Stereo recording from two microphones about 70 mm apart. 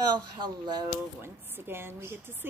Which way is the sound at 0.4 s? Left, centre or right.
Right.